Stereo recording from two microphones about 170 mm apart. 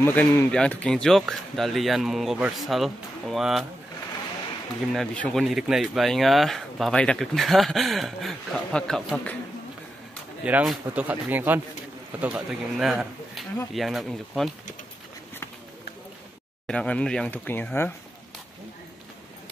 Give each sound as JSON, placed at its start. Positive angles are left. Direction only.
{"t": 0.0, "sound": "speech", "side_deg": 10}
{"t": 4.9, "sound": "speech", "side_deg": 5}
{"t": 10.4, "sound": "speech", "side_deg": -5}
{"t": 16.6, "sound": "speech", "side_deg": 5}